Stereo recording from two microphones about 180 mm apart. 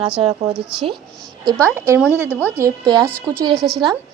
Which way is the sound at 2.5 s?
20° right (ahead or behind).